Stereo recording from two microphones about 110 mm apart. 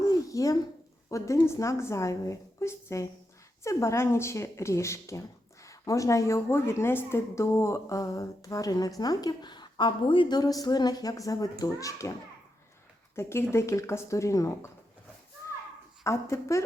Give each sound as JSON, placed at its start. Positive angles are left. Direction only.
{"t": 0.0, "sound": "a sound", "side_deg": 30}
{"t": 1.1, "sound": "a woman's voice", "side_deg": 25}
{"t": 13.1, "sound": "a woman's voice", "side_deg": 25}
{"t": 16.0, "sound": "a woman's voice", "side_deg": 25}